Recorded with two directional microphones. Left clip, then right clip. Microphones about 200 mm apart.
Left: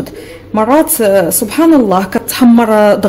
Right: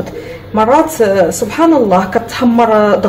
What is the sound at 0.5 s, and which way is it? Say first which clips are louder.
A woman's voice: right 1 dB; 45° left (ahead or behind).